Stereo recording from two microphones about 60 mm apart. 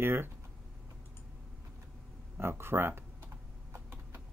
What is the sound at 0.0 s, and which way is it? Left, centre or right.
Speech, right.